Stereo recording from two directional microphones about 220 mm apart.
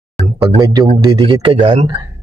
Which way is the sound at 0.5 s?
20° right (ahead or behind).